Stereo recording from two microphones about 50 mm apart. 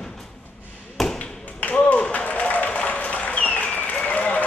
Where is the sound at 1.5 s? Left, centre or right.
Left.